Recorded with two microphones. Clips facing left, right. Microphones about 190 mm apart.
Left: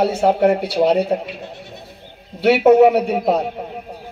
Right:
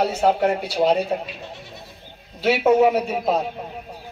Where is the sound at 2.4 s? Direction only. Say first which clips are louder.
Left 6 dB; 65° left (ahead or behind).